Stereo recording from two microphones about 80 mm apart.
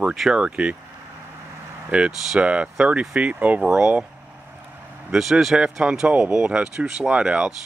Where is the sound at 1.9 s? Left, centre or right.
Centre.